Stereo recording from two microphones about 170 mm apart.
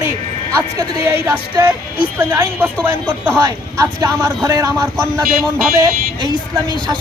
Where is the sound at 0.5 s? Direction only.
15° right (ahead or behind).